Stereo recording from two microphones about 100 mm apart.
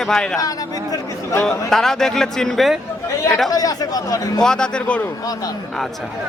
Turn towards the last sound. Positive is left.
turn(degrees=10)  # may be behind; listen again after turning